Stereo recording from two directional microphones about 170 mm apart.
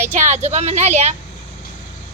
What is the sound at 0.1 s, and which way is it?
A woman's voice, 45° right (ahead or behind).